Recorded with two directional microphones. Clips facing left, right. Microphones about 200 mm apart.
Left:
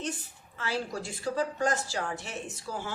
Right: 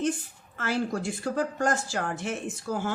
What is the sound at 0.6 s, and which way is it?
Speech, 50° right (ahead or behind).